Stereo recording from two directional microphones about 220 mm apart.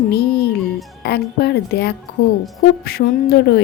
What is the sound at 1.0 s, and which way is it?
Speech, 50° left (ahead or behind).